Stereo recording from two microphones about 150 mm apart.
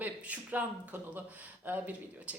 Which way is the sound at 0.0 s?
10° right (ahead or behind).